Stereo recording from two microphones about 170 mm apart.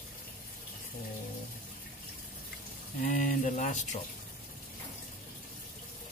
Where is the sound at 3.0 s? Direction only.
50° left (ahead or behind).